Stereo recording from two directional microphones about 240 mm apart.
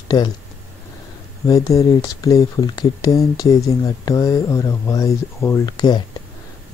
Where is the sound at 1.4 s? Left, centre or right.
Centre.